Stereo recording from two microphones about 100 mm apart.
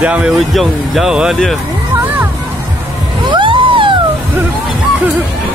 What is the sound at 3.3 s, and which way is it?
Music, 55° right (ahead or behind).